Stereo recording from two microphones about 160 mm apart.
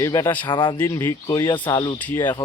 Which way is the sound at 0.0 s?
20° left (ahead or behind).